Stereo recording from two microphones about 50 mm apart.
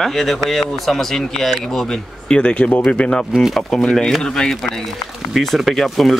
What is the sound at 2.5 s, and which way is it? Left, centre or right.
Speech, left.